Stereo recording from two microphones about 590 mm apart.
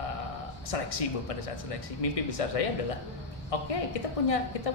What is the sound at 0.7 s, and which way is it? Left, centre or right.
Speech, left.